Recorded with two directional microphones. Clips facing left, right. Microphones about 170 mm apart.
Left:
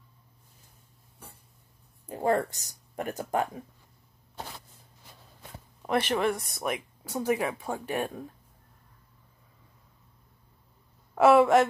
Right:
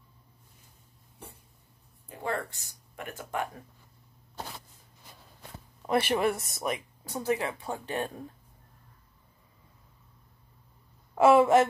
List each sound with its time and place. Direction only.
2.0 s speech: 40° left (ahead or behind)
5.9 s speech: 5° right (ahead or behind)
7.2 s speech: 15° left (ahead or behind)
11.1 s a sound: centre (ahead or behind)